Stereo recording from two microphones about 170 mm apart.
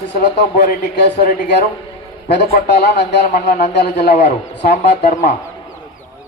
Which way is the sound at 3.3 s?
45° left (ahead or behind).